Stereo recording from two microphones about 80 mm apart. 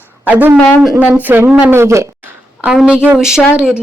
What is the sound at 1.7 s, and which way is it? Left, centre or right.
Speech, right.